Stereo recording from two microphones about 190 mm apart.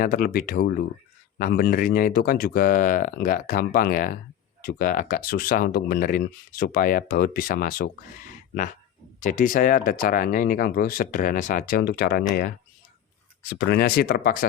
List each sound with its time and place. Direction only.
0.0 s speech: 50° left (ahead or behind)
9.2 s speech: 45° left (ahead or behind)